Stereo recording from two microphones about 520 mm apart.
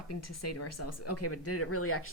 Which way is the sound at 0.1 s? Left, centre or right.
Left.